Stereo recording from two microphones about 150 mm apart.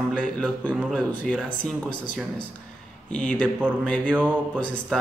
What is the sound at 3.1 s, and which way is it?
Speech, 5° left (ahead or behind).